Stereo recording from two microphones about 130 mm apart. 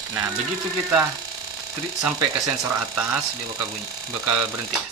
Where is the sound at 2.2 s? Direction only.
25° right (ahead or behind).